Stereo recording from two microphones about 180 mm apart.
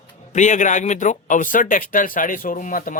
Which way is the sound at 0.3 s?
45° left (ahead or behind).